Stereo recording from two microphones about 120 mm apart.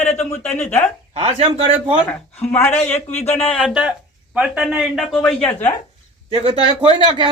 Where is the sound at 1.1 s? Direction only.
55° right (ahead or behind).